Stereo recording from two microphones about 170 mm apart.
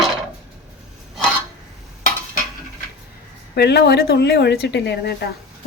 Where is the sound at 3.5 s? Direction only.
75° left (ahead or behind).